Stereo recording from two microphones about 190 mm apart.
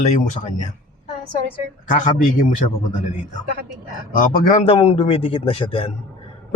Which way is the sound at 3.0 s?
40° left (ahead or behind).